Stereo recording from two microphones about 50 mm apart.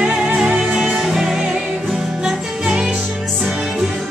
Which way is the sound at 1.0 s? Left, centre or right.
Centre.